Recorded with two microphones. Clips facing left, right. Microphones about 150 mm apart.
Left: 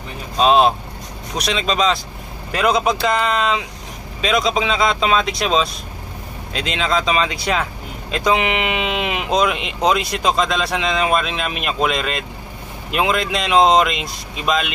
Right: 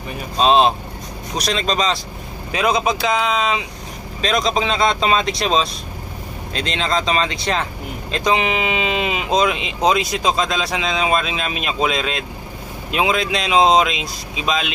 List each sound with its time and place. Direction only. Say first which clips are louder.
0.4 s speech: left 1 dB; 5° left (ahead or behind)